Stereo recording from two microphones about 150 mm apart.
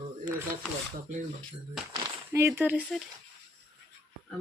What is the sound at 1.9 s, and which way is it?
Speech, 20° right (ahead or behind).